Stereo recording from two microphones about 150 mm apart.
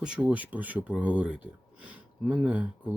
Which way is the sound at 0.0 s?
5° right (ahead or behind).